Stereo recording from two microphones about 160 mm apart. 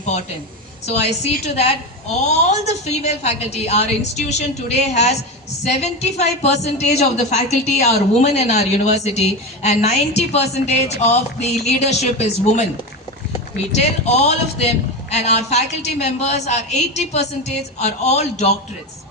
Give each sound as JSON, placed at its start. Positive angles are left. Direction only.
{"t": 0.9, "sound": "a woman's voice", "side_deg": 40}
{"t": 13.7, "sound": "a woman's voice", "side_deg": 45}